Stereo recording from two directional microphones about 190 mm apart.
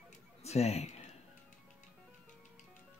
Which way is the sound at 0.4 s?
35° left (ahead or behind).